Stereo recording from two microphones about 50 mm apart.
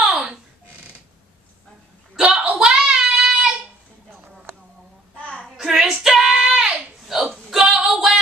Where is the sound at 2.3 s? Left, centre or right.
Right.